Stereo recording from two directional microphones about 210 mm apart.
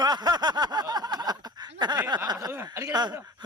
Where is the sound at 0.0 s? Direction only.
20° right (ahead or behind).